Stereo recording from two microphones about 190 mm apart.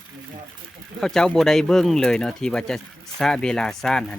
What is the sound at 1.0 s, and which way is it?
Speech, 5° left (ahead or behind).